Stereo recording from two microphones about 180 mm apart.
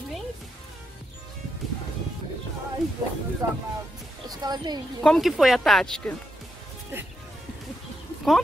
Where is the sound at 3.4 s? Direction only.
15° right (ahead or behind).